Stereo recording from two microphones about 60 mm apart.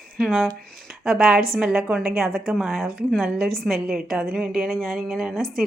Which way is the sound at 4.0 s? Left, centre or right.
Centre.